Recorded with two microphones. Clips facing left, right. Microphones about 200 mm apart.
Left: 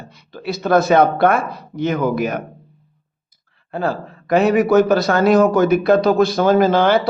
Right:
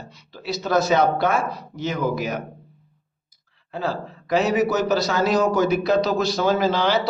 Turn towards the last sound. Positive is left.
turn(degrees=55)  # may be behind; listen again after turning